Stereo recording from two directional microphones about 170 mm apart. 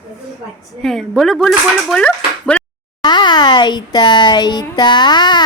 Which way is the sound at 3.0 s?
25° left (ahead or behind).